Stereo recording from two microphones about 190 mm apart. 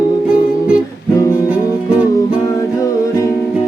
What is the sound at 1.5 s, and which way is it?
Music, 5° right (ahead or behind).